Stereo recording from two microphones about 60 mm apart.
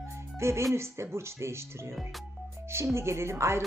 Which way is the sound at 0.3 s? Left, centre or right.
Right.